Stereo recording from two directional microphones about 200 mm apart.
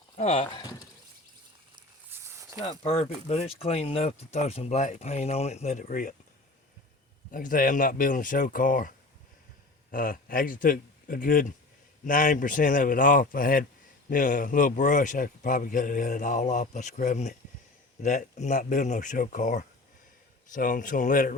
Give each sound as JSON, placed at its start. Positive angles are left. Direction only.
{"t": 0.2, "sound": "speech", "side_deg": 30}
{"t": 2.0, "sound": "a sound", "side_deg": -10}
{"t": 2.6, "sound": "speech", "side_deg": 30}
{"t": 7.3, "sound": "speech", "side_deg": 45}
{"t": 9.9, "sound": "speech", "side_deg": 45}